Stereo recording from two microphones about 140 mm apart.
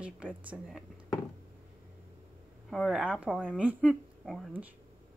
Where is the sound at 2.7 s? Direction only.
Centre (ahead or behind).